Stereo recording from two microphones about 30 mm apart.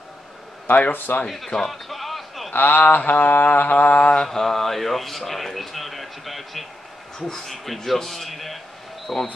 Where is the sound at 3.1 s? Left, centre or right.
Left.